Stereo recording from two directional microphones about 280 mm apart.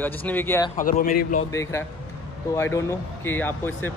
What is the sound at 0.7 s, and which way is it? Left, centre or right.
Speech, left.